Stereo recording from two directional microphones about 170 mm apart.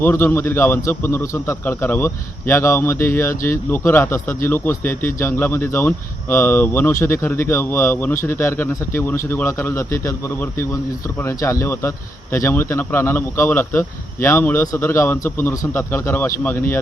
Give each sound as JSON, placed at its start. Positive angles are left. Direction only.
{"t": 0.0, "sound": "speech", "side_deg": 15}